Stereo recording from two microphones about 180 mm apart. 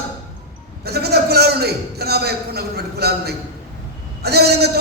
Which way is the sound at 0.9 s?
60° right (ahead or behind).